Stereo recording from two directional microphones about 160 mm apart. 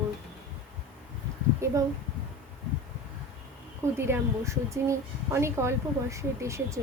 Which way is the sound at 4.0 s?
15° right (ahead or behind).